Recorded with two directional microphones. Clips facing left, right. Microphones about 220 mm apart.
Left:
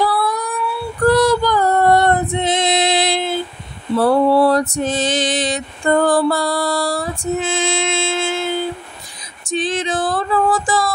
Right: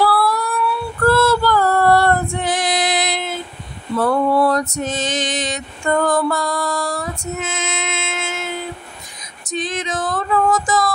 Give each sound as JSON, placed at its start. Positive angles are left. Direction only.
{"t": 0.0, "sound": "female singing", "side_deg": 20}
{"t": 3.9, "sound": "mantra", "side_deg": 30}
{"t": 9.5, "sound": "female singing", "side_deg": 30}